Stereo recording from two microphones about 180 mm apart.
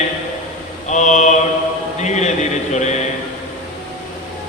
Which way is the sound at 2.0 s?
40° left (ahead or behind).